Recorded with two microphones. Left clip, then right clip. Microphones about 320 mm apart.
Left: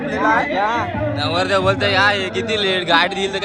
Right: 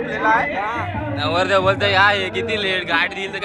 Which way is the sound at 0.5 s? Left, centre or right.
Left.